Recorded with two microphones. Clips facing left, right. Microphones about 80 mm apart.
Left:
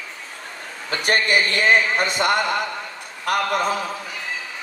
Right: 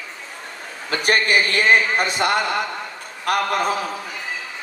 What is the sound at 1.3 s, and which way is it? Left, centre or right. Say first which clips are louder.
A man's voice: right 1 dB; right.